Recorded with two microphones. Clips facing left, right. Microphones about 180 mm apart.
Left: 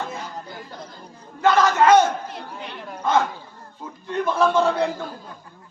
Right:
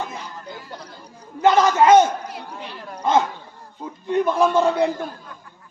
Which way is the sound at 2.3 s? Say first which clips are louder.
Even; centre (ahead or behind).